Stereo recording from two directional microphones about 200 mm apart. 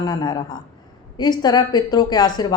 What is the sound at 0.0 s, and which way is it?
A woman's voice, 20° left (ahead or behind).